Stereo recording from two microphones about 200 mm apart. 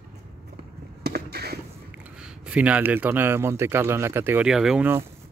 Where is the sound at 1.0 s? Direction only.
55° right (ahead or behind).